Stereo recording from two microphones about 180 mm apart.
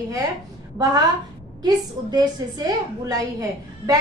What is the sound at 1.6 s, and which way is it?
A woman's voice, 20° right (ahead or behind).